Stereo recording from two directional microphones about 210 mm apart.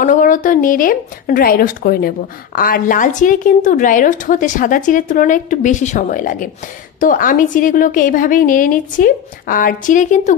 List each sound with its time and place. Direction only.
0.0 s speech: 40° left (ahead or behind)